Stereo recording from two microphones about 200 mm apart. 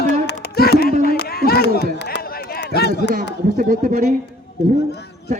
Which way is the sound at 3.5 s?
45° right (ahead or behind).